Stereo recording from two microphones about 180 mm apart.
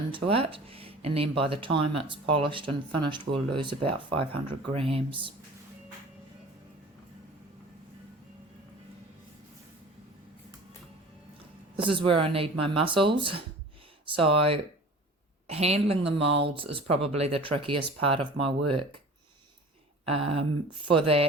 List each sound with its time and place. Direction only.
0.1 s speech: 30° right (ahead or behind)
11.8 s speech: 30° right (ahead or behind)
20.1 s speech: 30° right (ahead or behind)